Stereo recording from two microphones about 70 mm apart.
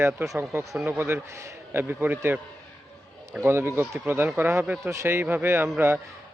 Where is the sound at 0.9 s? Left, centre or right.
Right.